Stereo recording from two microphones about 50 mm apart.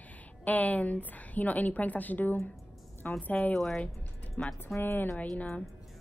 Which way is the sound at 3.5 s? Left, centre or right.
Centre.